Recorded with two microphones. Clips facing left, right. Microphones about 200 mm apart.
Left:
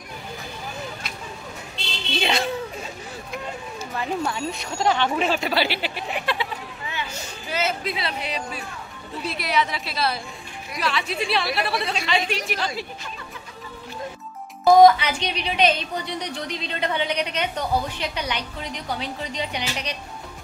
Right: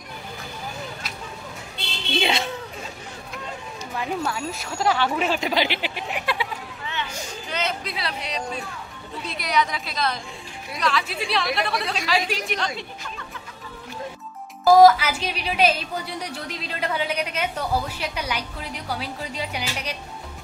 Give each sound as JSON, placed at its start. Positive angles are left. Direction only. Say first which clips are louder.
{"t": 2.1, "sound": "a child's voice", "louder": "right 1 dB", "side_deg": -25}
{"t": 4.3, "sound": "speech", "louder": "left 1 dB", "side_deg": -5}
{"t": 6.9, "sound": "a sound", "louder": "right 2 dB", "side_deg": 10}
{"t": 9.2, "sound": "speech", "louder": "even", "side_deg": 5}
{"t": 14.6, "sound": "speech", "louder": "even", "side_deg": -5}